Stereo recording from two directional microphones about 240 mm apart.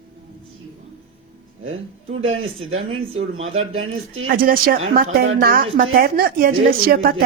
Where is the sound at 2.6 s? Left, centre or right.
Right.